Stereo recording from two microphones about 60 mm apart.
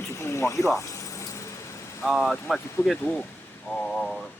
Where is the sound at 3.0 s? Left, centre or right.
Left.